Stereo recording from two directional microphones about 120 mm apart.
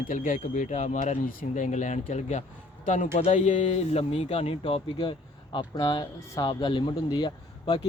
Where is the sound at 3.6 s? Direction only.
60° left (ahead or behind).